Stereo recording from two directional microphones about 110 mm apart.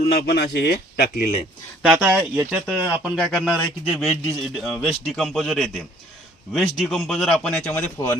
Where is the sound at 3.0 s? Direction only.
5° left (ahead or behind).